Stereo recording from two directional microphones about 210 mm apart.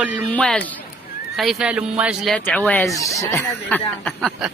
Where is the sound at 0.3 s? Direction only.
5° left (ahead or behind).